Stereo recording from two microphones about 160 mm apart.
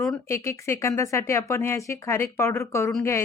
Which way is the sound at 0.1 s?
15° left (ahead or behind).